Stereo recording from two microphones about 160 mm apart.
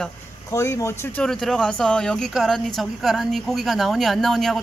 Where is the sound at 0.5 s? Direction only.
20° left (ahead or behind).